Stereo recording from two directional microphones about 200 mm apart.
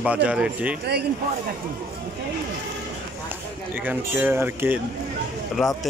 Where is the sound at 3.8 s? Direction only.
10° right (ahead or behind).